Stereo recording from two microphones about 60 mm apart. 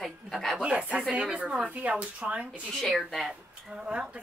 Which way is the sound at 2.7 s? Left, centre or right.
Centre.